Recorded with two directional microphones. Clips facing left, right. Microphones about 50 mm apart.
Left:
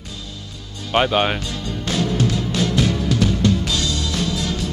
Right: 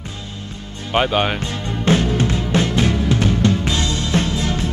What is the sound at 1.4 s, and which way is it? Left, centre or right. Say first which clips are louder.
Music: right 4 dB; right.